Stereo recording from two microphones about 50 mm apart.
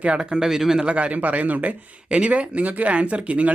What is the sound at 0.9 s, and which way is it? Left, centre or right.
Speech, right.